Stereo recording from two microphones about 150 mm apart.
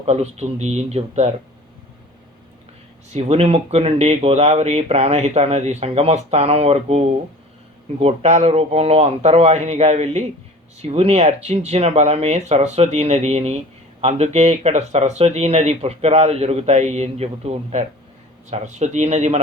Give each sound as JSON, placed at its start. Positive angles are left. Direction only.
{"t": 0.0, "sound": "speech", "side_deg": -45}
{"t": 3.1, "sound": "speech", "side_deg": -45}